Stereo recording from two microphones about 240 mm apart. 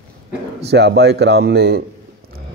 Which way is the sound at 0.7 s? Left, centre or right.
Right.